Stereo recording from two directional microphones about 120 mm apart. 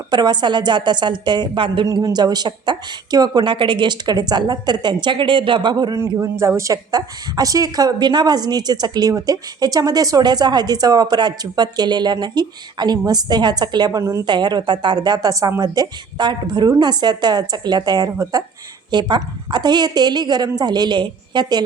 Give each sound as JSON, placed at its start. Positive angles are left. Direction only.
{"t": 0.1, "sound": "a woman's voice", "side_deg": -35}
{"t": 6.0, "sound": "a man's voice", "side_deg": -25}
{"t": 14.3, "sound": "a woman's voice", "side_deg": -40}